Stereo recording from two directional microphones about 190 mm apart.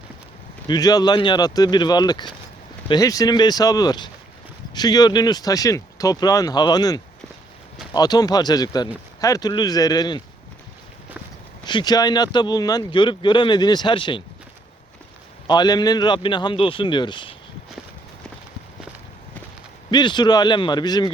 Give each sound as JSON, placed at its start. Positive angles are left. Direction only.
{"t": 0.7, "sound": "speech", "side_deg": 20}
{"t": 11.6, "sound": "speech", "side_deg": 25}
{"t": 15.4, "sound": "speech", "side_deg": 20}
{"t": 19.9, "sound": "speech", "side_deg": 25}